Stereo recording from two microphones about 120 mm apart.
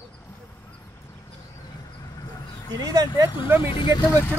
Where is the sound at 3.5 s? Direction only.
45° left (ahead or behind).